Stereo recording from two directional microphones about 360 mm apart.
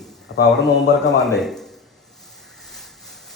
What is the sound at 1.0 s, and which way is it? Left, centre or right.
Speech, centre.